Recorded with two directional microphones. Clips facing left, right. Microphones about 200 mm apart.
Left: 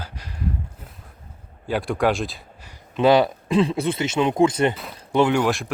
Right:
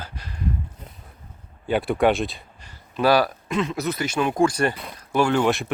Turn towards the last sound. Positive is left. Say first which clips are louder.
# right 1 dB
turn(degrees=0)  # may be behind; listen again after turning